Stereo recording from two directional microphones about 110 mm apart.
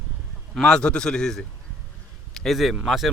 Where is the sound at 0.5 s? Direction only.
5° left (ahead or behind).